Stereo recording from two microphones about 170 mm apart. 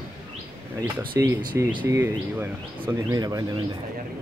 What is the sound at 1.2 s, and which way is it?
Speech, 15° right (ahead or behind).